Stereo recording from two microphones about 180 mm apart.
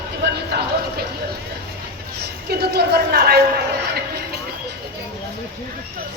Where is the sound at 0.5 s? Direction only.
65° right (ahead or behind).